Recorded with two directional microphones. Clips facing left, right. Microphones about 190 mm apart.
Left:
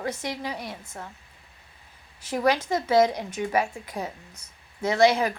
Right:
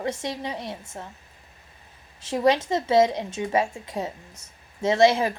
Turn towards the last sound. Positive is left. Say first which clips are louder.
# right 2 dB
turn(degrees=-25)  # may be behind; listen again after turning